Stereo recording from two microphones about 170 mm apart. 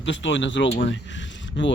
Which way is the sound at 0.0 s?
90° left.